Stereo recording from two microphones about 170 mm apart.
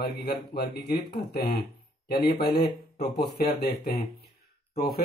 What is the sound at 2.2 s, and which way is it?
Speech, 80° left.